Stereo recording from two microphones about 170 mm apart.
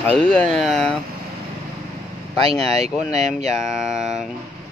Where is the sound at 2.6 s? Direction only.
40° right (ahead or behind).